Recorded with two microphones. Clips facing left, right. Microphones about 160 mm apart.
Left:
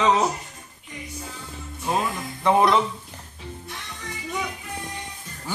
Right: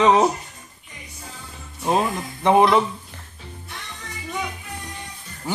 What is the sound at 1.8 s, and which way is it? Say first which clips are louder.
Speech: right 4 dB; 25° right (ahead or behind).